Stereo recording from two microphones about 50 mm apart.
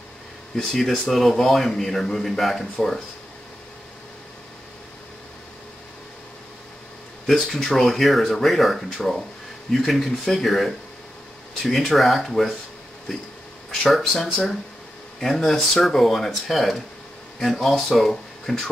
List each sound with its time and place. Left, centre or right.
0.6 s a man's voice: centre
7.2 s a man's voice: centre
13.8 s a man's voice: centre